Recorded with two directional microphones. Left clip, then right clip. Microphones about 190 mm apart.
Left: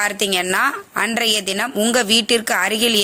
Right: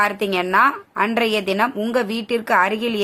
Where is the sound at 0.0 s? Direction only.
15° left (ahead or behind).